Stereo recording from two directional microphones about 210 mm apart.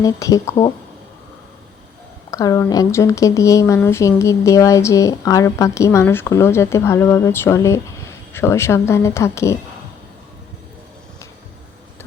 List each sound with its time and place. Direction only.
0.0 s a woman's voice: 15° left (ahead or behind)
2.3 s a woman's voice: 15° left (ahead or behind)